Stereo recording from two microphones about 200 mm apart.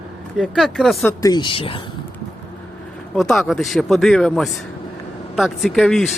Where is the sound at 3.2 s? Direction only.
Centre (ahead or behind).